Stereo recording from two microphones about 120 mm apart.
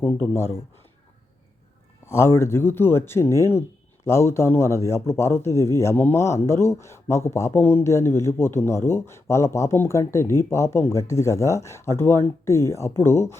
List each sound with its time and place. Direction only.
0.0 s a man's voice: 20° left (ahead or behind)
2.0 s a man's voice: 20° left (ahead or behind)